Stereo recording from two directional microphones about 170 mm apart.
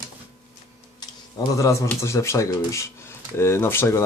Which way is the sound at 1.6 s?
15° left (ahead or behind).